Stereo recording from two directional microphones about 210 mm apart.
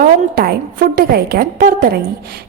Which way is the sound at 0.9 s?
45° right (ahead or behind).